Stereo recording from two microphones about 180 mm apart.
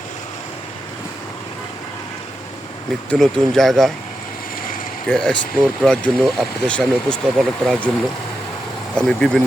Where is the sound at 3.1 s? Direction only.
5° left (ahead or behind).